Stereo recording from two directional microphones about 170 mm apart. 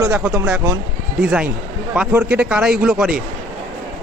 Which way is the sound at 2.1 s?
5° right (ahead or behind).